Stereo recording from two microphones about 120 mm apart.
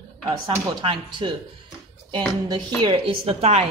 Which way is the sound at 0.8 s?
40° right (ahead or behind).